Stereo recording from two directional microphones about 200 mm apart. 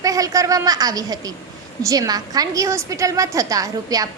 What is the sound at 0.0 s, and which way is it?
A woman's voice, 15° right (ahead or behind).